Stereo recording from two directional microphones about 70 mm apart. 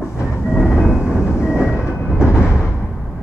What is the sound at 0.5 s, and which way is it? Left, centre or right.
Train, centre.